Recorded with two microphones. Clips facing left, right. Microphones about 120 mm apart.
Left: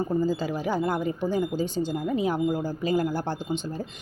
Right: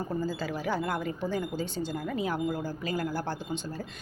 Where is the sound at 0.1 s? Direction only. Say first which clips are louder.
Left 6 dB; 15° left (ahead or behind).